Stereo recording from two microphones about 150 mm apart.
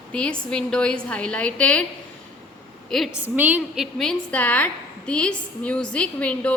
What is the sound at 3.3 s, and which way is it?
Speech, 10° right (ahead or behind).